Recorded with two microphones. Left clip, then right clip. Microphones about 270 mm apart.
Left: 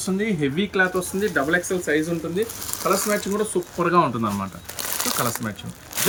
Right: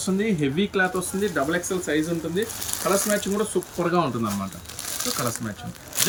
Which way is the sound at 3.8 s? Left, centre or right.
Centre.